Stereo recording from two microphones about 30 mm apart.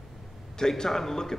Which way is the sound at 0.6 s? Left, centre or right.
Left.